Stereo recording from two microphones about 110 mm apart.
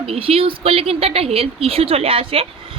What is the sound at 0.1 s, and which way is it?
A woman's voice, 60° right (ahead or behind).